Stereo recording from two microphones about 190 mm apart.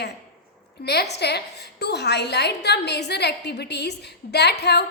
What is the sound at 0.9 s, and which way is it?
A woman's voice, 60° left (ahead or behind).